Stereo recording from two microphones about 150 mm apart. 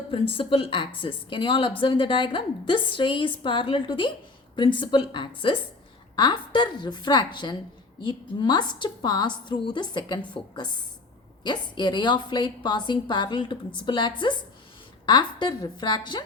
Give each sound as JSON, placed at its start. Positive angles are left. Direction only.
{"t": 0.1, "sound": "a woman's voice", "side_deg": 35}